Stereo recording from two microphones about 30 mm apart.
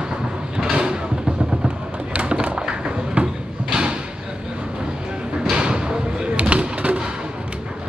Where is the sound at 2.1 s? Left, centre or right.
Right.